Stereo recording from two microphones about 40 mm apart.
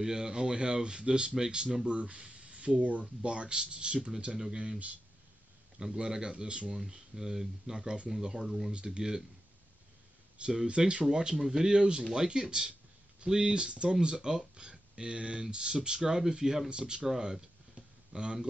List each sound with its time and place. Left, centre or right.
0.0 s speech: centre
1.9 s speech: right
5.8 s speech: centre
6.9 s speech: centre
8.7 s speech: right
10.3 s speech: right
17.2 s a sound: centre